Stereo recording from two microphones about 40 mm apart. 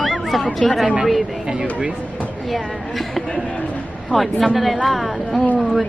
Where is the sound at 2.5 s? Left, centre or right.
Centre.